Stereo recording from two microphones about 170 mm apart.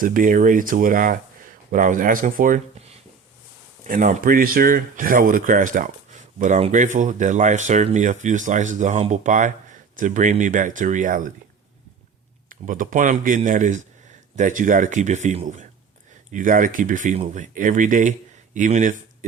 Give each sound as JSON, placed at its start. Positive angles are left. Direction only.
{"t": 0.0, "sound": "speech", "side_deg": -50}
{"t": 3.8, "sound": "speech", "side_deg": -50}
{"t": 12.5, "sound": "speech", "side_deg": -50}
{"t": 16.3, "sound": "speech", "side_deg": -50}